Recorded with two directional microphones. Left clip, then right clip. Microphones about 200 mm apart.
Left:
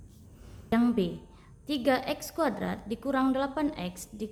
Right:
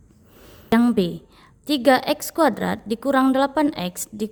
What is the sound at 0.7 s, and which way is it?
A woman's voice, 45° right (ahead or behind).